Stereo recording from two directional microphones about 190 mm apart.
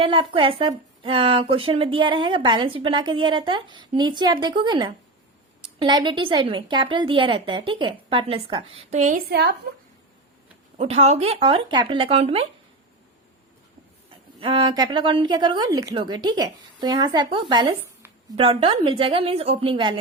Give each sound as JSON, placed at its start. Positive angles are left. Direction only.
{"t": 0.0, "sound": "speech", "side_deg": -25}
{"t": 9.3, "sound": "speech", "side_deg": -60}
{"t": 10.8, "sound": "speech", "side_deg": -30}
{"t": 14.3, "sound": "speech", "side_deg": -25}